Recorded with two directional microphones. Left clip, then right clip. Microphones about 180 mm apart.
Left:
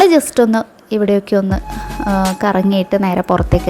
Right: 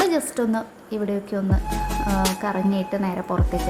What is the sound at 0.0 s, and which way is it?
A woman's voice, 40° left (ahead or behind).